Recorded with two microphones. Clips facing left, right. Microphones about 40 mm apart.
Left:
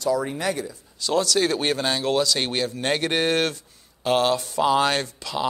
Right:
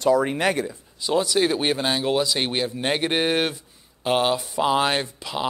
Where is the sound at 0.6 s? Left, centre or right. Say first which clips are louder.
Right 1 dB; centre.